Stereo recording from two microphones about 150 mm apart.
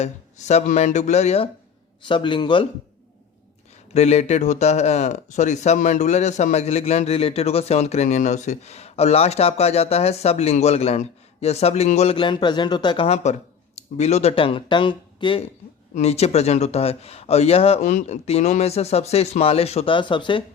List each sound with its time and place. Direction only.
0.0 s speech: 50° left (ahead or behind)
2.0 s a man's voice: 30° left (ahead or behind)
3.9 s speech: 45° left (ahead or behind)
13.7 s speech: 45° left (ahead or behind)
16.0 s speech: 45° left (ahead or behind)